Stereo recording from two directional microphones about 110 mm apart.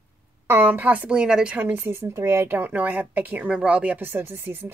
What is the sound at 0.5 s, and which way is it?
Speech, 20° right (ahead or behind).